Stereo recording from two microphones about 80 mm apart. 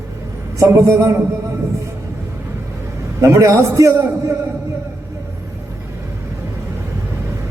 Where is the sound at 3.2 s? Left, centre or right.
Right.